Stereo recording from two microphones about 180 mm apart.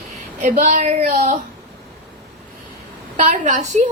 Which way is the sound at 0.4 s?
40° right (ahead or behind).